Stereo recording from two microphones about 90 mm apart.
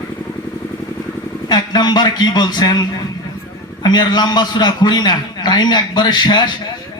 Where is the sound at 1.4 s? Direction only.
50° left (ahead or behind).